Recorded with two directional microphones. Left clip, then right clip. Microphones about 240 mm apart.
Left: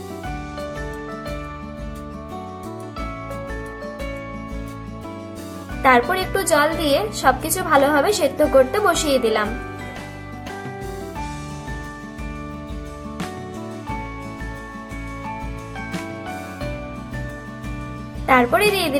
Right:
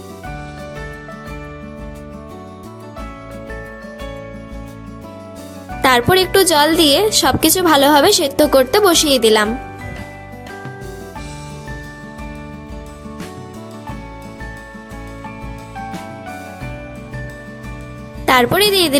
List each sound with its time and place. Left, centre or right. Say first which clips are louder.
5.8 s a woman's voice: right 3 dB; right
18.3 s speech: right 3 dB; right